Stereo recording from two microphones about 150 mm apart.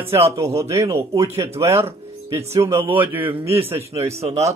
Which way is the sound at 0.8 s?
20° right (ahead or behind).